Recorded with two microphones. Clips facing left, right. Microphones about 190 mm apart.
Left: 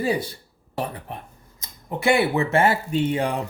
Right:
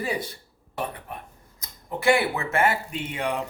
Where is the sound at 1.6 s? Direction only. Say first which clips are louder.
Left 2 dB; 20° left (ahead or behind).